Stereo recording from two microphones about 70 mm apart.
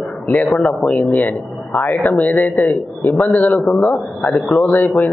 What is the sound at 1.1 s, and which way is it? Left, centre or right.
Speech, left.